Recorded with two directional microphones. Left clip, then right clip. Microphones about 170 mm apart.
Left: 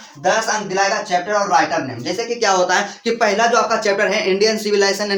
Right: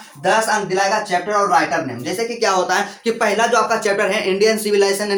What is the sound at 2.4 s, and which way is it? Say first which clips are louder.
Speech: left 2 dB; 20° left (ahead or behind).